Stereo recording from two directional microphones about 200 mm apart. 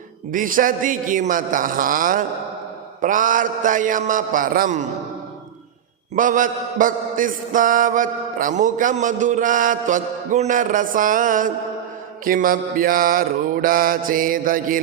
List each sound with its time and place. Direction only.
0.3 s mantra: 45° right (ahead or behind)
6.1 s mantra: 40° right (ahead or behind)